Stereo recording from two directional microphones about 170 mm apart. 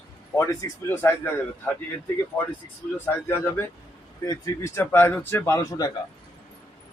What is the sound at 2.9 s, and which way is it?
A man's voice, 15° left (ahead or behind).